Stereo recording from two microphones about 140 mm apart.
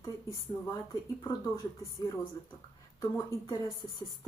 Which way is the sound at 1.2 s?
25° left (ahead or behind).